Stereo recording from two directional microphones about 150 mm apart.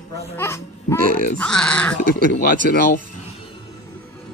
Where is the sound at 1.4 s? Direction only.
5° left (ahead or behind).